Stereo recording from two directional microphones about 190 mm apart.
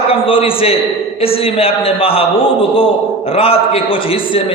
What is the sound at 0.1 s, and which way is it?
A man's voice, 30° left (ahead or behind).